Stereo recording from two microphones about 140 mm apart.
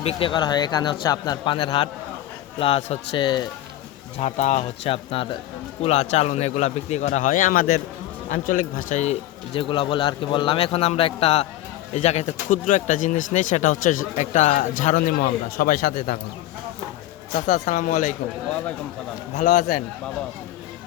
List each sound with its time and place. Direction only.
0.0 s a man's voice: 40° left (ahead or behind)
1.5 s a man's voice: 40° left (ahead or behind)
4.2 s speech: 55° left (ahead or behind); by 7.8 s 90° left
8.3 s speech: 80° left
9.0 s speech: 50° left (ahead or behind)
9.6 s a man's voice: 35° left (ahead or behind); by 16.1 s 90° left
17.3 s speech: 55° left (ahead or behind)
19.4 s speech: 65° left (ahead or behind)